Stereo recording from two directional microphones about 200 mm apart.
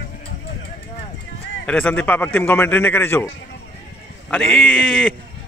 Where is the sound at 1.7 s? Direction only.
5° left (ahead or behind).